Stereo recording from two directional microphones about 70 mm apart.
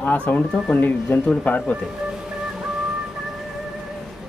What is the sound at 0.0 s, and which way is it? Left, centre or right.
Speech, left.